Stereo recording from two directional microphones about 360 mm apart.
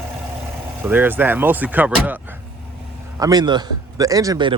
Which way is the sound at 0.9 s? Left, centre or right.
Centre.